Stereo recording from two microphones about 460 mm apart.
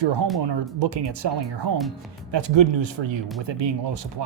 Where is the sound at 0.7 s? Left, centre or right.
Right.